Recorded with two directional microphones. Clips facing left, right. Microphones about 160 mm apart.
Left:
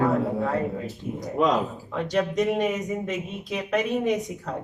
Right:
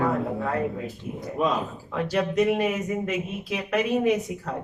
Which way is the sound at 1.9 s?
5° right (ahead or behind).